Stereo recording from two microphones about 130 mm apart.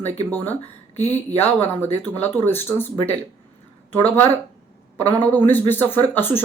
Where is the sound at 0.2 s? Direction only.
15° left (ahead or behind).